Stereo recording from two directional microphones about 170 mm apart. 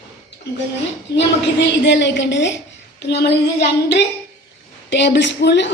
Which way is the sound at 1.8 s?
90° left.